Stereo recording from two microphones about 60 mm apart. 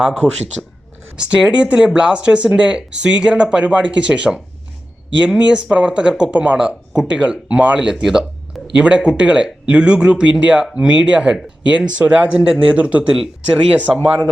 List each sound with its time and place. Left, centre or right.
0.0 s speech: centre
5.4 s speech: centre
8.0 s a sound: centre
8.7 s speech: centre